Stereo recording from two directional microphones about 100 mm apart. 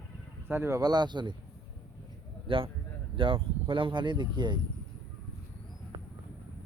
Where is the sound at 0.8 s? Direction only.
45° right (ahead or behind).